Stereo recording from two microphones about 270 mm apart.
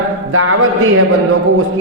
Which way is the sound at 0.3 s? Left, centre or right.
Right.